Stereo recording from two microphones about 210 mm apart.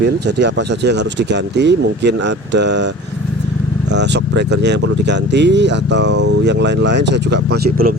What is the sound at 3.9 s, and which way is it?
Speech, 55° right (ahead or behind).